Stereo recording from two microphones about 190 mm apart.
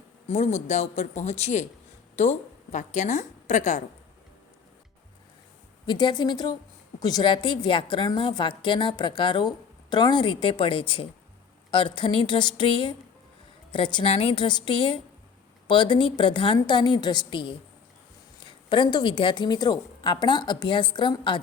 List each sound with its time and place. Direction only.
0.3 s speech: 35° left (ahead or behind)
2.7 s speech: 40° left (ahead or behind)
5.8 s a woman's voice: 25° left (ahead or behind)